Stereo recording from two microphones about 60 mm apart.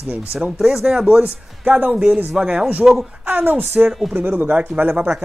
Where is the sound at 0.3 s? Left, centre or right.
Centre.